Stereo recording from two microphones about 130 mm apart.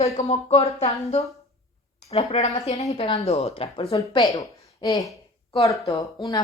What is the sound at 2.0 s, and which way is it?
Speech, 55° left (ahead or behind).